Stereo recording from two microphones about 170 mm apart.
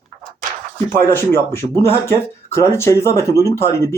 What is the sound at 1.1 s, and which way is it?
Speech, 15° left (ahead or behind).